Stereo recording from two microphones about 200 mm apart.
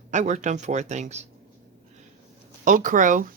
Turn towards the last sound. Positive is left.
turn(degrees=-40)  # may be behind; listen again after turning